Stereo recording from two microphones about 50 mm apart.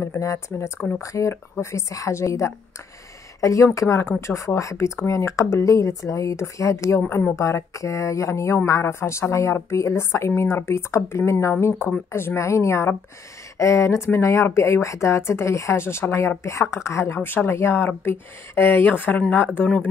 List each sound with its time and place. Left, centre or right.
0.0 s speech: left
0.7 s speech: left
1.0 s a woman's voice: left
3.3 s speech: left
4.2 s a woman's voice: left
12.4 s speech: left
17.2 s speech: left